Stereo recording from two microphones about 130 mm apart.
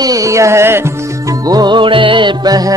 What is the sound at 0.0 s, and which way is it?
Music, 25° right (ahead or behind).